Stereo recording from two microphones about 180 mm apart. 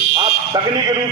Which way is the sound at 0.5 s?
20° right (ahead or behind).